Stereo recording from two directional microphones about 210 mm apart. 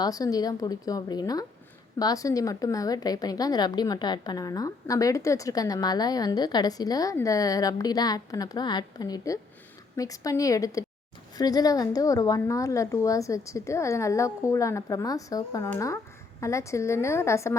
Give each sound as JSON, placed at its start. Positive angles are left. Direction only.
{"t": 0.0, "sound": "a woman's voice", "side_deg": 15}